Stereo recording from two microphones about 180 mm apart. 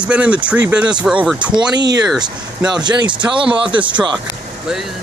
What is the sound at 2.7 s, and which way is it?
Speech, 25° right (ahead or behind).